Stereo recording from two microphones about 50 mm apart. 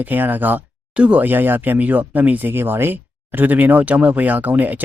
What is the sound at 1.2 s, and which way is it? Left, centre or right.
Speech, right.